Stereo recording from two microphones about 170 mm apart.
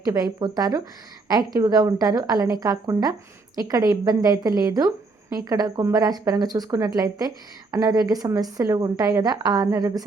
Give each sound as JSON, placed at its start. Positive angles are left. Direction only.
{"t": 0.0, "sound": "speech", "side_deg": -20}